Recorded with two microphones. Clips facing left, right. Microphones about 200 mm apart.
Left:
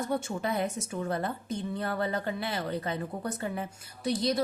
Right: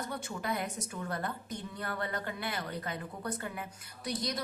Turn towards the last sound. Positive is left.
turn(degrees=25)  # may be behind; listen again after turning